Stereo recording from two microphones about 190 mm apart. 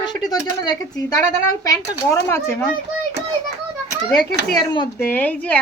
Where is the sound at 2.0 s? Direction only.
15° left (ahead or behind).